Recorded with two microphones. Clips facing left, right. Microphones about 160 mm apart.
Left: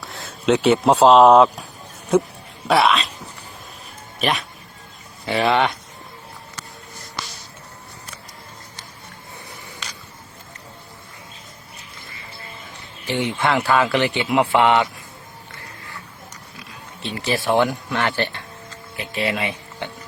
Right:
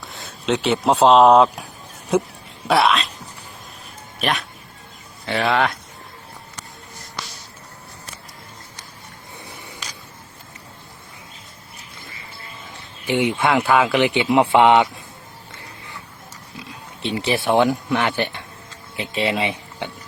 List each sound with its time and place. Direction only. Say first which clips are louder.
0.0 s speech: left 5 dB; centre (ahead or behind)
2.6 s speech: even; centre (ahead or behind)
4.2 s speech: left 1 dB; centre (ahead or behind)
13.1 s speech: right 2 dB; 15° right (ahead or behind)
16.6 s speech: right 5 dB; 20° right (ahead or behind)